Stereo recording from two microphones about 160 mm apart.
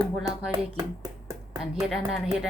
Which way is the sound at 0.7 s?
20° right (ahead or behind).